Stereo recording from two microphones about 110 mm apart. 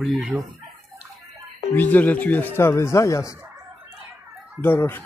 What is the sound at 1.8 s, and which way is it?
Speech, 15° left (ahead or behind).